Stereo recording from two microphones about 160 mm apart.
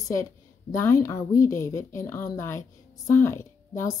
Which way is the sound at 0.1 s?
20° left (ahead or behind).